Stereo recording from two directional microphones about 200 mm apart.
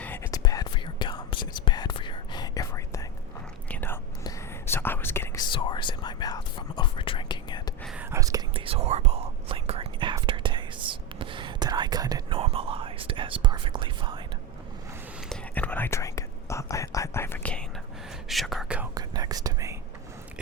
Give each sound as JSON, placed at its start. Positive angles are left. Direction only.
{"t": 0.0, "sound": "whispering", "side_deg": 10}
{"t": 8.1, "sound": "whispering", "side_deg": -15}
{"t": 15.3, "sound": "whispering", "side_deg": 10}
{"t": 18.9, "sound": "whispering", "side_deg": -20}